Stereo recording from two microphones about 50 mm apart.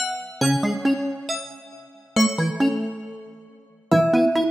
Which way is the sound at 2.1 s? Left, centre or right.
Centre.